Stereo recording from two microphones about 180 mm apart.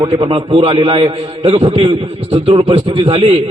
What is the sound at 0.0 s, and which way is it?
A man's voice, 25° right (ahead or behind).